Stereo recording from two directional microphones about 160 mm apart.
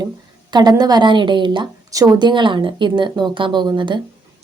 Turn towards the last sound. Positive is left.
turn(degrees=-30)  # may be behind; listen again after turning